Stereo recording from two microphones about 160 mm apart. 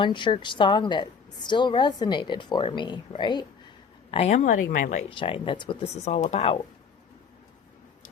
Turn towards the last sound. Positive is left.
turn(degrees=40)  # may be behind; listen again after turning